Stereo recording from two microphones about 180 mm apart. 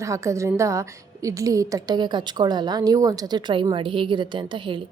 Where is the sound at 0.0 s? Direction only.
15° right (ahead or behind).